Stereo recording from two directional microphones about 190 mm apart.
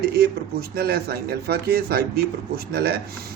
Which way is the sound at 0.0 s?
55° right (ahead or behind).